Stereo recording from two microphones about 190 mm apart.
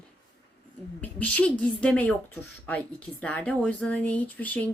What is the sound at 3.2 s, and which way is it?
Speech, 5° left (ahead or behind).